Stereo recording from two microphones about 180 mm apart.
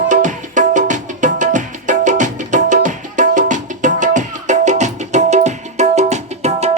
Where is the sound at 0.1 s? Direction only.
45° right (ahead or behind).